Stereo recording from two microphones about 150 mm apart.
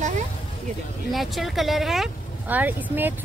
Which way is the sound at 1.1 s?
Centre (ahead or behind).